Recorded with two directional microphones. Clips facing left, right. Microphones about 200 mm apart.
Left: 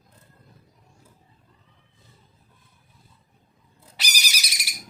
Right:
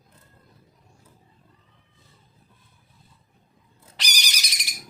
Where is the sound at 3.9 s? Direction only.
5° left (ahead or behind).